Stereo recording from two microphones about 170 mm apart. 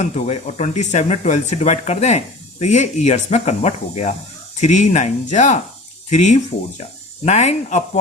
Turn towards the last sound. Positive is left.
turn(degrees=40)  # may be behind; listen again after turning